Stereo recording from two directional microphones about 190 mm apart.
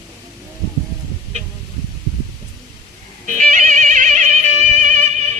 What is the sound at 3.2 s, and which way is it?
Music, 40° right (ahead or behind).